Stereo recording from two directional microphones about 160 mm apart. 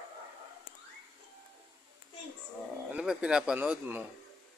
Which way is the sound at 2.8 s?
5° right (ahead or behind).